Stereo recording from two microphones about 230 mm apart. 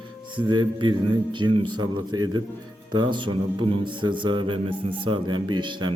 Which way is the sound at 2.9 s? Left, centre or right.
Centre.